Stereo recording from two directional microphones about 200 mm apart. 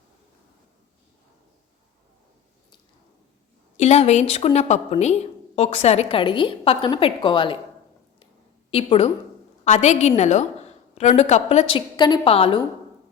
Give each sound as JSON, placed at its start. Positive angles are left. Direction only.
{"t": 3.8, "sound": "a woman's voice", "side_deg": 35}
{"t": 8.7, "sound": "a woman's voice", "side_deg": 30}